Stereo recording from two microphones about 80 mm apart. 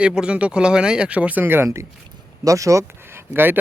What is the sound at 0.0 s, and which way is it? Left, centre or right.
Speech, centre.